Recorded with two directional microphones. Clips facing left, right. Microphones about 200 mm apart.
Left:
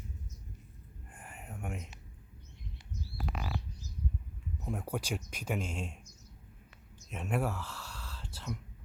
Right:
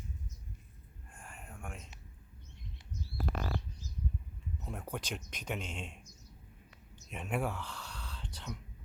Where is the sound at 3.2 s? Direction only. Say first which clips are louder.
Right 2 dB; 55° right (ahead or behind).